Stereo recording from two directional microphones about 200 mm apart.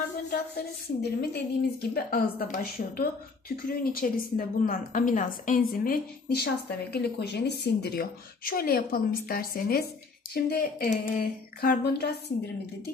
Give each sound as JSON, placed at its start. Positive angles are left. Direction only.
{"t": 0.6, "sound": "a woman's voice", "side_deg": 50}